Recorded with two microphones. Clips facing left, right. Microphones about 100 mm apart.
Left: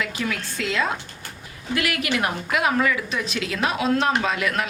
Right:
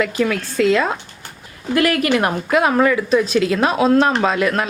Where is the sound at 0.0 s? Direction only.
55° right (ahead or behind).